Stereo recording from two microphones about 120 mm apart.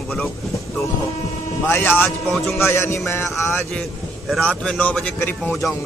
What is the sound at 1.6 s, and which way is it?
A man's voice, 15° left (ahead or behind).